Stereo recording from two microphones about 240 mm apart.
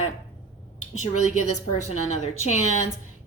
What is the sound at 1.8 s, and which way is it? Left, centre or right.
Speech, left.